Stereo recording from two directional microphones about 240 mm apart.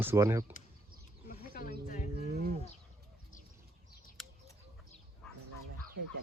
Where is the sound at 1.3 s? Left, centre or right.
Left.